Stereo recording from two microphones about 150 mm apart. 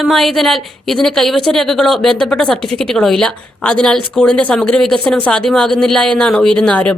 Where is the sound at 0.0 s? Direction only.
Centre (ahead or behind).